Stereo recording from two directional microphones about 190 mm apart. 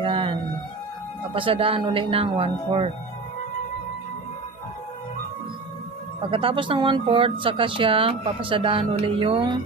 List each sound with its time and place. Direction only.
0.0 s a sound: 30° right (ahead or behind)
1.3 s speech: 30° right (ahead or behind)
6.3 s speech: 25° right (ahead or behind)